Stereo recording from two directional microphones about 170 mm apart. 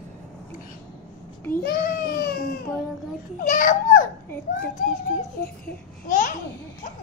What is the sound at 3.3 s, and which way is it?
Speech, 50° left (ahead or behind).